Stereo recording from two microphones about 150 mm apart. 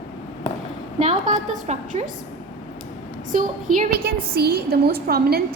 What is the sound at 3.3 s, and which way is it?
A woman's voice, 60° right (ahead or behind).